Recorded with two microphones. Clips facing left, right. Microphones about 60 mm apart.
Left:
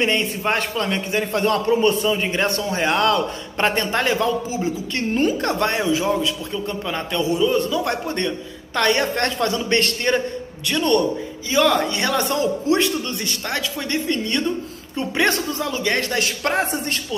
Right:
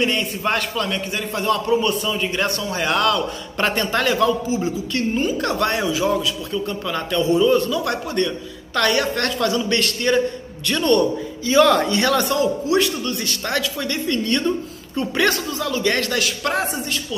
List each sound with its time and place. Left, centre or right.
0.0 s a woman's voice: left
1.3 s a man's voice: left
1.7 s a man's voice: left
5.1 s a woman's voice: left
6.5 s a man's voice: centre
7.8 s a woman's voice: left
10.6 s a man's voice: centre
11.4 s a man's voice: centre
12.3 s a woman's voice: left
15.3 s a woman's voice: left
15.7 s a man's voice: centre
16.2 s a woman's voice: left